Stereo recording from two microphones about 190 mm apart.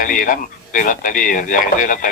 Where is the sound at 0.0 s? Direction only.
45° left (ahead or behind).